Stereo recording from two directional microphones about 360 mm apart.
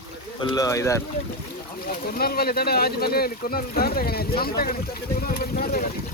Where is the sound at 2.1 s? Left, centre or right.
Left.